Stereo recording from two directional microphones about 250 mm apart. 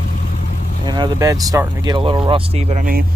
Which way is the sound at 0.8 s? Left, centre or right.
Centre.